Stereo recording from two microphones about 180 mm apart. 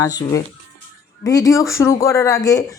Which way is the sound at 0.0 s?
20° left (ahead or behind).